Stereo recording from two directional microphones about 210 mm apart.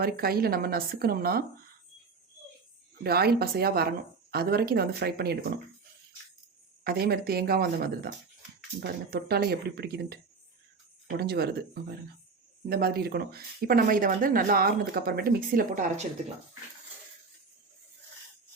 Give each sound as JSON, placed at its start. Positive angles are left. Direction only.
{"t": 0.0, "sound": "speech", "side_deg": -45}
{"t": 3.0, "sound": "speech", "side_deg": -50}
{"t": 6.8, "sound": "speech", "side_deg": -45}